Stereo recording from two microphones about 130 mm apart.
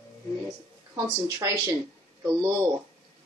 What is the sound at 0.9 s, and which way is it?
Speech, 25° right (ahead or behind).